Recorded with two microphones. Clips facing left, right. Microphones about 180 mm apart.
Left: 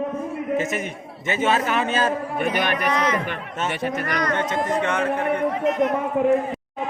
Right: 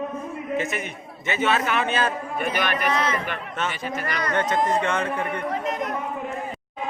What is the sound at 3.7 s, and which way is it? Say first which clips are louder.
Speech: left 5 dB; 60° left (ahead or behind).